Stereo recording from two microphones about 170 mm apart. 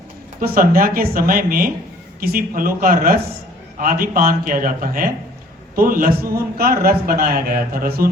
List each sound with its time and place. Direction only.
0.3 s a man's voice: 55° right (ahead or behind)